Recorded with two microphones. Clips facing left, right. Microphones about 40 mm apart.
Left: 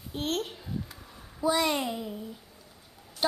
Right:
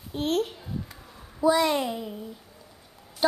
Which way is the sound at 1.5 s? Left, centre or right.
Centre.